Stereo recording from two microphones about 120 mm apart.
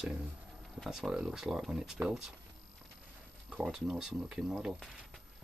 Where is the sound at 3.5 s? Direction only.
5° right (ahead or behind).